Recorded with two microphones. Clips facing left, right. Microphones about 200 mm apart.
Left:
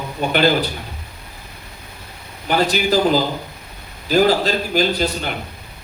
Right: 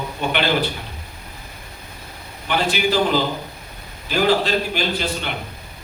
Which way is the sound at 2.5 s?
40° left (ahead or behind).